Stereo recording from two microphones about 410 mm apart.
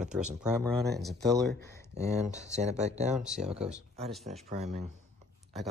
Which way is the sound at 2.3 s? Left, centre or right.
Centre.